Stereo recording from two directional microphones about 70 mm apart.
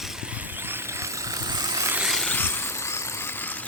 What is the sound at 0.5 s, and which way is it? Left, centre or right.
Vehicle, right.